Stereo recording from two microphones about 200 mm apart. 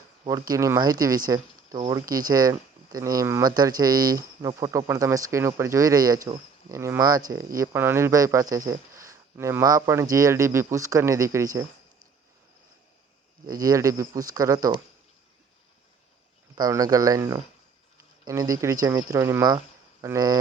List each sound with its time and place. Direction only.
0.3 s speech: 20° right (ahead or behind)
13.5 s speech: 20° right (ahead or behind)
16.6 s speech: 20° right (ahead or behind)